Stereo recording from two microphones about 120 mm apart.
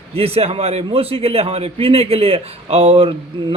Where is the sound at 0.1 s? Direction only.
55° right (ahead or behind).